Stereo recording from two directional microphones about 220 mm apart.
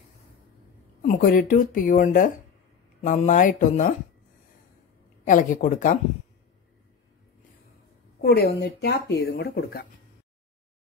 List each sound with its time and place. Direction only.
1.0 s speech: 40° left (ahead or behind)
5.2 s speech: 35° left (ahead or behind)
8.2 s speech: 45° left (ahead or behind)